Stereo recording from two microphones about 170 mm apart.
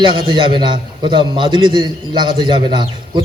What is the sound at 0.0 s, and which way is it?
A man's voice, 25° right (ahead or behind).